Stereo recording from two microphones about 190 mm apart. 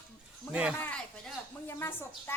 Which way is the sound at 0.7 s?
10° left (ahead or behind).